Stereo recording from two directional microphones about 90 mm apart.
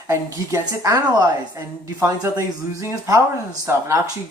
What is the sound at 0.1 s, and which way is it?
Speech, 35° right (ahead or behind).